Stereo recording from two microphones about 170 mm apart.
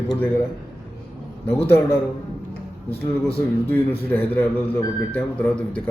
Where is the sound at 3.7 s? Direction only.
10° left (ahead or behind).